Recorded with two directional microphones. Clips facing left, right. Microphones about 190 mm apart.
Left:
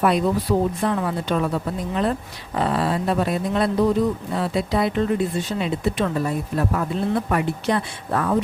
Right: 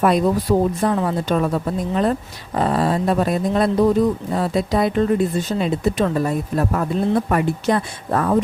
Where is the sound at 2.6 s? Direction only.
40° right (ahead or behind).